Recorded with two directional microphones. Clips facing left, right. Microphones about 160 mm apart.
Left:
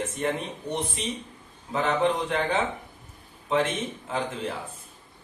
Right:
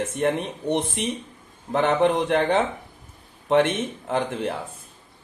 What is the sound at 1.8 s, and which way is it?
Speech, 65° right (ahead or behind).